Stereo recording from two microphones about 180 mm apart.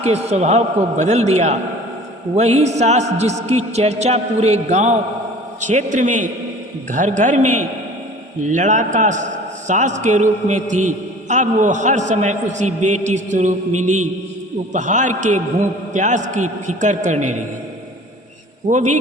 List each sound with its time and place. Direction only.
0.0 s a man's voice: 35° right (ahead or behind)
14.7 s a man's voice: 45° right (ahead or behind)
18.7 s a man's voice: 45° right (ahead or behind)